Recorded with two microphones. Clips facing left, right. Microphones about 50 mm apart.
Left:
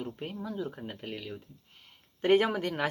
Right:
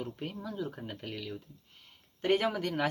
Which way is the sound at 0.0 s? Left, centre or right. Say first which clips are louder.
Left 1 dB; centre.